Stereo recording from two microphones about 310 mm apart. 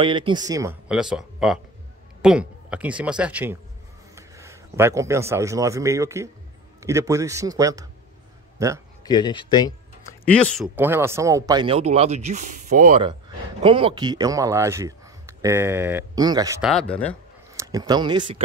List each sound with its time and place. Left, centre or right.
0.0 s a man's voice: centre
9.0 s speech: centre
10.8 s speech: centre
16.7 s speech: centre
17.6 s speech: centre